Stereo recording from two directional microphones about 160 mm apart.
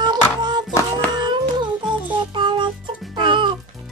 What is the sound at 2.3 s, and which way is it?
Music, 30° right (ahead or behind).